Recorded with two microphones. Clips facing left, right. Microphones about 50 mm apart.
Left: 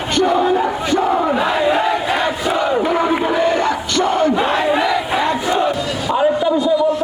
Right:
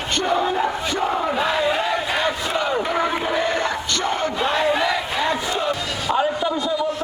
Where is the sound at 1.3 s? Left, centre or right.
Centre.